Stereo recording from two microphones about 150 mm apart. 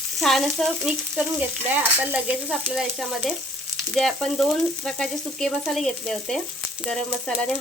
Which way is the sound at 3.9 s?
Centre (ahead or behind).